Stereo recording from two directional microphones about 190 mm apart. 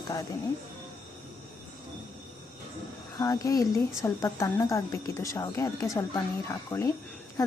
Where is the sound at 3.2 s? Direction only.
20° left (ahead or behind).